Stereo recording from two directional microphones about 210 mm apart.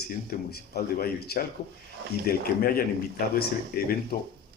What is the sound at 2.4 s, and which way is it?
Speech, 45° left (ahead or behind).